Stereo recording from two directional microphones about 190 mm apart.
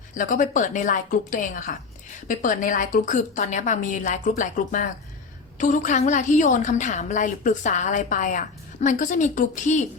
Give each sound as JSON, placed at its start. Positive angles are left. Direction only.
{"t": 0.1, "sound": "a woman's voice", "side_deg": 45}